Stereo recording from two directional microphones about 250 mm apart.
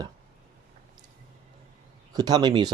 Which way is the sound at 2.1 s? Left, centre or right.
Centre.